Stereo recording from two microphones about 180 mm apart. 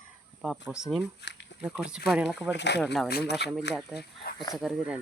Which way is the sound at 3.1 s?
60° left (ahead or behind).